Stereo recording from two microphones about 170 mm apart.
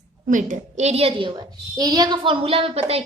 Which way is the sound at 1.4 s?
20° right (ahead or behind).